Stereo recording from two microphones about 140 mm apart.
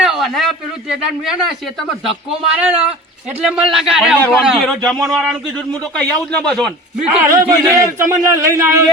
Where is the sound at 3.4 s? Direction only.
5° right (ahead or behind).